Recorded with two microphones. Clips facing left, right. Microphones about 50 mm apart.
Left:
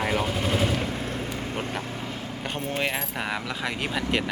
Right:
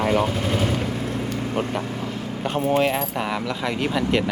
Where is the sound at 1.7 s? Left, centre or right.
Right.